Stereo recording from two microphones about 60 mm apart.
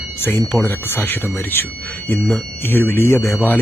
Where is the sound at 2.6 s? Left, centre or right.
Left.